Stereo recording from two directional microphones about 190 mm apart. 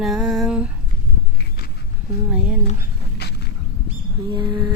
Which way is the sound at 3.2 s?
60° left (ahead or behind).